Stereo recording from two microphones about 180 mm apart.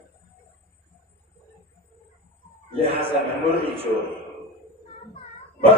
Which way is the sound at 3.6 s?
30° right (ahead or behind).